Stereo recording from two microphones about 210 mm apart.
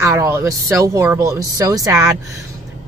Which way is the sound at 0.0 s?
15° right (ahead or behind).